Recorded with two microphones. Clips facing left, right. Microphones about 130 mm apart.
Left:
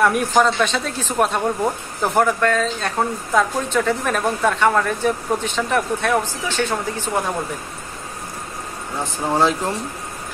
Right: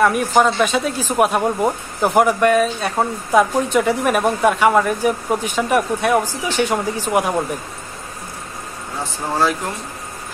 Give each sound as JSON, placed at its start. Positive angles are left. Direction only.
{"t": 0.0, "sound": "a woman's voice", "side_deg": 0}
{"t": 9.0, "sound": "speech", "side_deg": 20}